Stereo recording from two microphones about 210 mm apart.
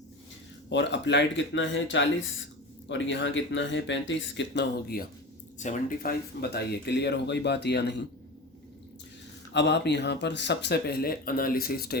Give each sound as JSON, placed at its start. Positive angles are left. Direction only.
{"t": 0.7, "sound": "speech", "side_deg": 55}
{"t": 4.4, "sound": "speech", "side_deg": 50}
{"t": 5.5, "sound": "speech", "side_deg": 35}
{"t": 9.5, "sound": "speech", "side_deg": 55}